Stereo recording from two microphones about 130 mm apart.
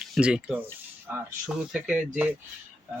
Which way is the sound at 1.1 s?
20° right (ahead or behind).